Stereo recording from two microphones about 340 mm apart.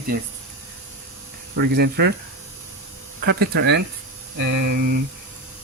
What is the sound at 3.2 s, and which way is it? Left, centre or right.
Speech, right.